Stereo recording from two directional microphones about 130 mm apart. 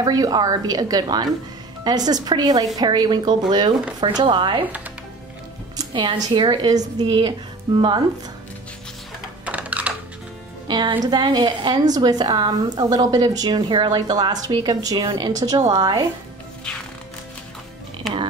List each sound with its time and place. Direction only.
0.0 s a woman's voice: 30° right (ahead or behind)
5.8 s a woman's voice: 35° right (ahead or behind)
9.5 s typing: 10° right (ahead or behind)
10.7 s a woman's voice: 35° right (ahead or behind)